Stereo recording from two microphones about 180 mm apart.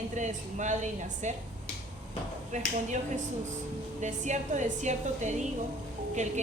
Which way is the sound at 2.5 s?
40° right (ahead or behind).